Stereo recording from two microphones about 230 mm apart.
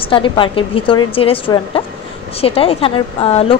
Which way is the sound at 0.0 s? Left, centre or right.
Left.